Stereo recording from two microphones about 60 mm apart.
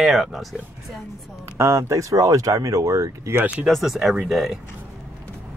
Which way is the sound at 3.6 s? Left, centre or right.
Centre.